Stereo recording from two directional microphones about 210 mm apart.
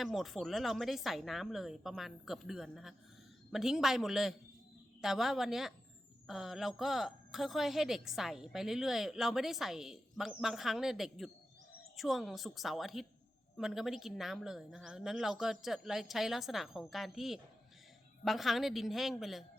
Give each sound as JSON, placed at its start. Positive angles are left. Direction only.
{"t": 0.0, "sound": "a woman's voice", "side_deg": 0}